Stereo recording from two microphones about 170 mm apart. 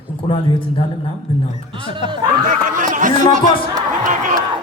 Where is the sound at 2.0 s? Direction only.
40° left (ahead or behind).